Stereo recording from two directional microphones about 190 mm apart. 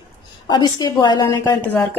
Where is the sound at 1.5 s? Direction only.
10° left (ahead or behind).